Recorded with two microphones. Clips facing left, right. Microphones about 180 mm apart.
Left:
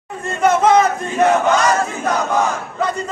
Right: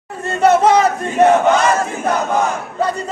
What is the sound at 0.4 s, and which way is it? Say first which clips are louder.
Speech: right 1 dB; 35° right (ahead or behind).